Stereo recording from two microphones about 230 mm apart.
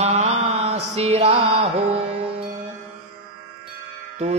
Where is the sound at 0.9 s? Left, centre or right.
Right.